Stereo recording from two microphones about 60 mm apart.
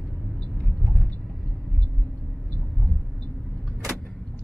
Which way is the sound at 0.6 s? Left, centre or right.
Centre.